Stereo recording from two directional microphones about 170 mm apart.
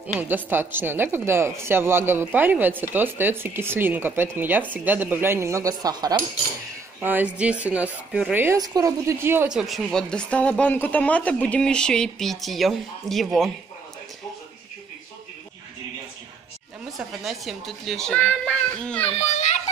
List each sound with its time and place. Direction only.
0.1 s a woman's voice: 10° right (ahead or behind)
7.0 s a woman's voice: 10° right (ahead or behind)
16.9 s a woman's voice: centre (ahead or behind)
19.0 s a child's voice: 40° left (ahead or behind)